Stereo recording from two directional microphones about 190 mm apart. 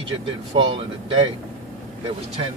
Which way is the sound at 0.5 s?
30° right (ahead or behind).